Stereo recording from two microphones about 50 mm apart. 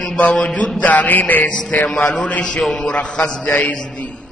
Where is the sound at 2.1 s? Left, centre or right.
Left.